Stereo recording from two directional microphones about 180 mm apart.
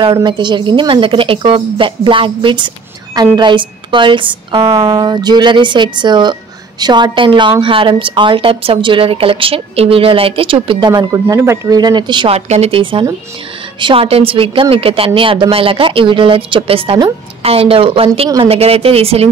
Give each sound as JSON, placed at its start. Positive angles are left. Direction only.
{"t": 0.0, "sound": "a woman's voice", "side_deg": -25}